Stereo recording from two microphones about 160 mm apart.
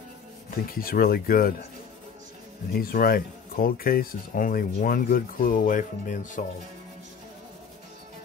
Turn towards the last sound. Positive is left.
turn(degrees=55)  # may be behind; listen again after turning